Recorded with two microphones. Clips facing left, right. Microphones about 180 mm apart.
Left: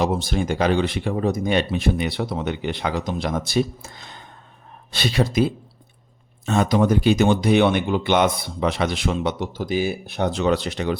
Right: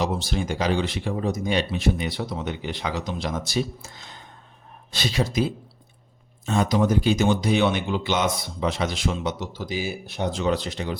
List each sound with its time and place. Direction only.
0.0 s speech: 50° left (ahead or behind); by 10.9 s 70° left (ahead or behind)